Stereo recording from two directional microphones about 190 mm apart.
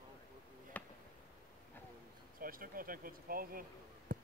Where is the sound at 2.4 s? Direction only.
50° right (ahead or behind).